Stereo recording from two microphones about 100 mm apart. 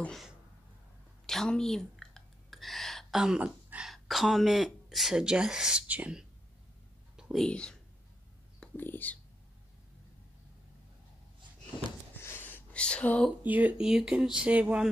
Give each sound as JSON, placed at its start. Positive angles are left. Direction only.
{"t": 1.2, "sound": "speech", "side_deg": 5}
{"t": 7.2, "sound": "whispering", "side_deg": -5}
{"t": 7.4, "sound": "speech", "side_deg": 10}
{"t": 8.7, "sound": "speech", "side_deg": 20}
{"t": 12.2, "sound": "a sound", "side_deg": 20}
{"t": 13.4, "sound": "speech", "side_deg": -15}